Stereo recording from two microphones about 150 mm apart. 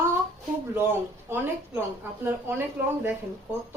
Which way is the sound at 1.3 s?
15° right (ahead or behind).